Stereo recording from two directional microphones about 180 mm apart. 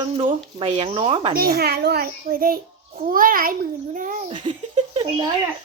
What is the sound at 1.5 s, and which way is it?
A child's voice, 65° right (ahead or behind).